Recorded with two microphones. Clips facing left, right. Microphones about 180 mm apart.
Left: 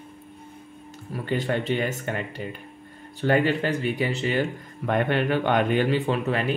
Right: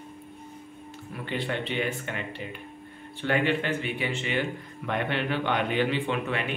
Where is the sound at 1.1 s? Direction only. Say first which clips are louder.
Left 5 dB; 40° left (ahead or behind).